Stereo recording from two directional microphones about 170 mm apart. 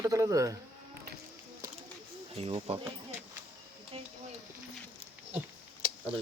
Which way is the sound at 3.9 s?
35° right (ahead or behind).